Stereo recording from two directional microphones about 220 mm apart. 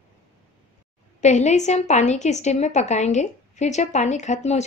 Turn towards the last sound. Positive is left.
turn(degrees=30)  # may be behind; listen again after turning